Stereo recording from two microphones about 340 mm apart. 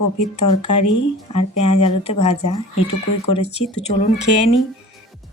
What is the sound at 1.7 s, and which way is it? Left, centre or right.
Speech, centre.